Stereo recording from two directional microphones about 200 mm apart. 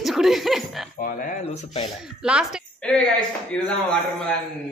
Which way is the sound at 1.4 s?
30° left (ahead or behind).